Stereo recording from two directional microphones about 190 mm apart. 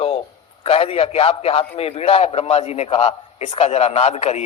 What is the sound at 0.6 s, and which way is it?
A man's voice, 30° left (ahead or behind).